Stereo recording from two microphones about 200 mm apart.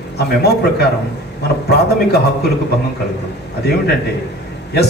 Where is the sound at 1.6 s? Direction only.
55° left (ahead or behind).